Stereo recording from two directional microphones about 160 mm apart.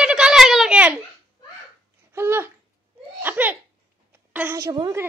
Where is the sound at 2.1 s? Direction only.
15° right (ahead or behind).